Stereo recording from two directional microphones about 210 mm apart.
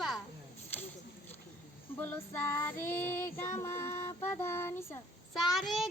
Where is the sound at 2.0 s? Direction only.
10° left (ahead or behind).